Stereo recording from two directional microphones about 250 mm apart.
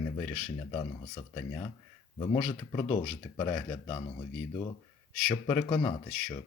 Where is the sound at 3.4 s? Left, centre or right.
Centre.